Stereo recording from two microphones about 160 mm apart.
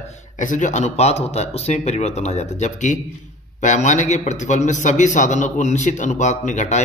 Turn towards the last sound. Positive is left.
turn(degrees=45)  # may be behind; listen again after turning